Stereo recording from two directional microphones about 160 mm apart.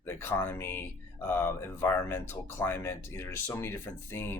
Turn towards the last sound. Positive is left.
turn(degrees=15)  # may be behind; listen again after turning